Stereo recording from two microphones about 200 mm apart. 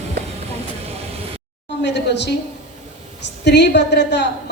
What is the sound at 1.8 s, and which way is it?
Speech, 60° left (ahead or behind).